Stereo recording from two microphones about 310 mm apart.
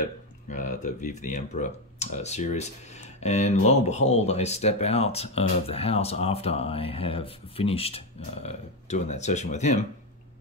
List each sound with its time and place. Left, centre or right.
0.0 s speech: left